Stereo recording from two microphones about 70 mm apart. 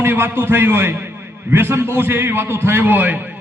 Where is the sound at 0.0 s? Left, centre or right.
Right.